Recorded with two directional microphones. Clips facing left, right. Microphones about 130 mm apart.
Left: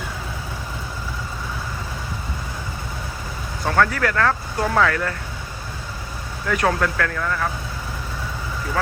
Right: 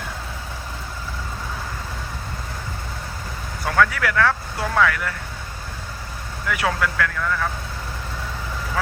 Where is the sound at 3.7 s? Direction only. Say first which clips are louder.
Even; 30° left (ahead or behind).